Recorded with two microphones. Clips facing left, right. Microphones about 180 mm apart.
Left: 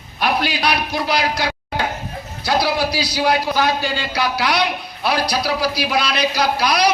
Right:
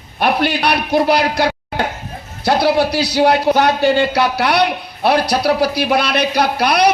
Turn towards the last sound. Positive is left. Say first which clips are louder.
# right 3 dB
turn(degrees=-60)  # may be behind; listen again after turning